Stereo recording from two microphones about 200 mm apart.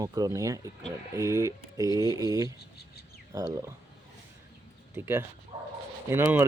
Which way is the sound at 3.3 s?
15° right (ahead or behind).